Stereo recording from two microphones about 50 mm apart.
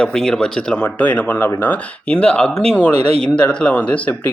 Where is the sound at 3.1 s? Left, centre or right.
Left.